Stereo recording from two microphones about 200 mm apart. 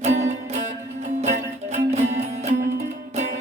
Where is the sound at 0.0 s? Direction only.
35° right (ahead or behind).